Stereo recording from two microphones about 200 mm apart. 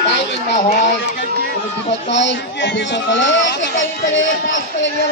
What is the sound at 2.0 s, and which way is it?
Speech, 65° left (ahead or behind).